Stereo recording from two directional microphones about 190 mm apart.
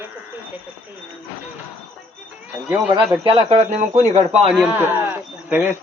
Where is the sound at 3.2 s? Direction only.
35° right (ahead or behind).